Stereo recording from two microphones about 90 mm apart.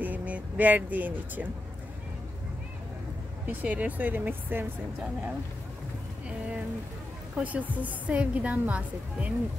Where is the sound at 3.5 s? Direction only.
15° right (ahead or behind).